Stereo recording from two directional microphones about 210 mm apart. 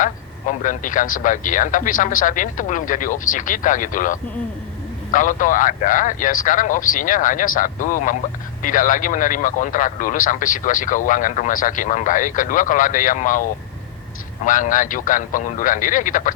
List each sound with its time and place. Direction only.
0.6 s speech: 40° left (ahead or behind)